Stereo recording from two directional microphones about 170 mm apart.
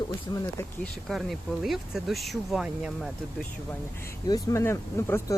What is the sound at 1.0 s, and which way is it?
Speech, centre (ahead or behind).